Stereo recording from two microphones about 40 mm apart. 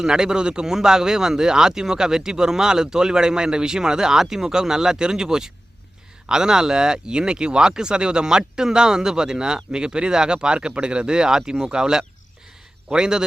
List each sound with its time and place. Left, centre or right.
0.0 s speech: centre